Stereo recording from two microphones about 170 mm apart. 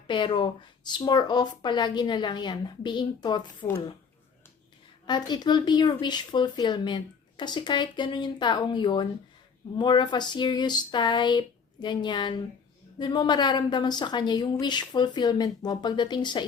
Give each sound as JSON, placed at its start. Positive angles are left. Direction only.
{"t": 0.1, "sound": "speech", "side_deg": 30}
{"t": 5.0, "sound": "speech", "side_deg": 25}